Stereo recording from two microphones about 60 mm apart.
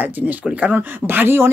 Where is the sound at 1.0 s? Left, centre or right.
Right.